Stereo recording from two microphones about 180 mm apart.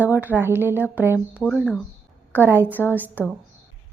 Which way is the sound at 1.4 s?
Centre (ahead or behind).